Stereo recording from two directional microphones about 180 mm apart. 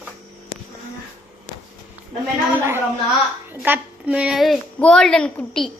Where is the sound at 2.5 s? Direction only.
15° right (ahead or behind).